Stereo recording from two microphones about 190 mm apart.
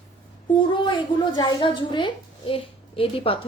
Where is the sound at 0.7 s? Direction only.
25° left (ahead or behind).